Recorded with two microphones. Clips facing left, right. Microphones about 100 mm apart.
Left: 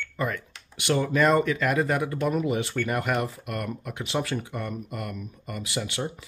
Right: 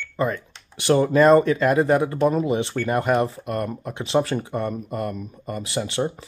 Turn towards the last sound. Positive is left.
turn(degrees=-30)  # may be behind; listen again after turning